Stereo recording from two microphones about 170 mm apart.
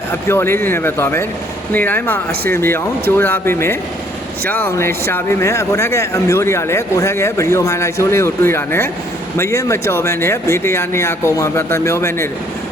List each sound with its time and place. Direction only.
0.3 s speech: 15° left (ahead or behind)